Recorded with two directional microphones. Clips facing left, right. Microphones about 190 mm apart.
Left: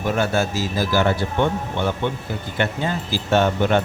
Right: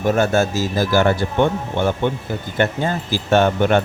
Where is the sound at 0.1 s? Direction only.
45° right (ahead or behind).